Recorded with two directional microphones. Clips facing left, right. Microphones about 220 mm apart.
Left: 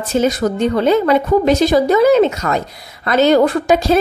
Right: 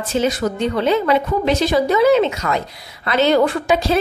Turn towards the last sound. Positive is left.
turn(degrees=45)  # may be behind; listen again after turning